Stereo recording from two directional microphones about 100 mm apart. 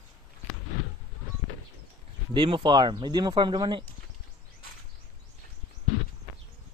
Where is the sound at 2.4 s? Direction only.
55° right (ahead or behind).